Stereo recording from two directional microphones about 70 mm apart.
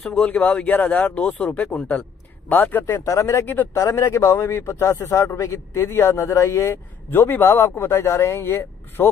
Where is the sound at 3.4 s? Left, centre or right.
Left.